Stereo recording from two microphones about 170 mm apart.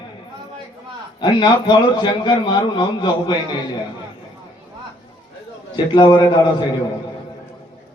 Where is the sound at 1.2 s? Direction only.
25° left (ahead or behind).